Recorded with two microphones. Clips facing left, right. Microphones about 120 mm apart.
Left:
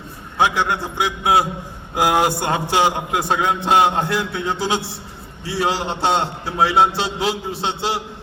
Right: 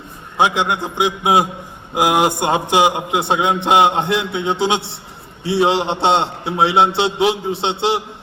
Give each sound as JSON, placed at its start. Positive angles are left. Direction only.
{"t": 0.3, "sound": "a man's voice", "side_deg": -20}